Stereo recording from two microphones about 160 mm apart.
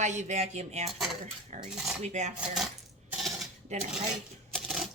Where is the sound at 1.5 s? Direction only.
45° right (ahead or behind).